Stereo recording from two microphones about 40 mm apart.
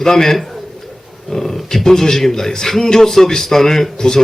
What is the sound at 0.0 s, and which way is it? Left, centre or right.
A man's voice, centre.